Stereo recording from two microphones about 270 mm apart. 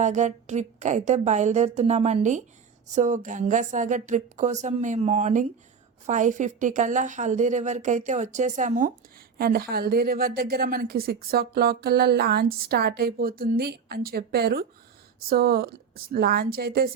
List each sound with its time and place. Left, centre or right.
0.0 s a woman's voice: right